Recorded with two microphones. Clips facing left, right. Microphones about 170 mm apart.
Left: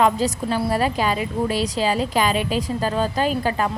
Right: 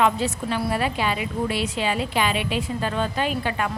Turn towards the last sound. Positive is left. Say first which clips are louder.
# left 4 dB
turn(degrees=35)  # may be behind; listen again after turning